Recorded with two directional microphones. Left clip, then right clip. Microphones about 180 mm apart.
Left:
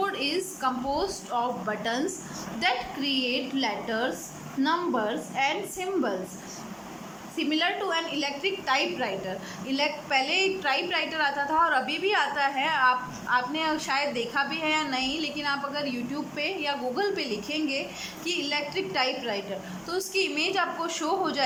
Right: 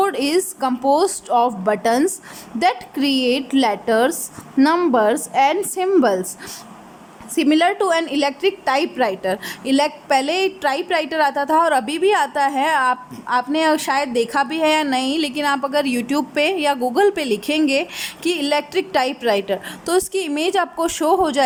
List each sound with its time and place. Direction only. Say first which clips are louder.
0.0 s a woman's voice: right 10 dB; 45° right (ahead or behind)
7.3 s a woman's voice: right 11 dB; 50° right (ahead or behind)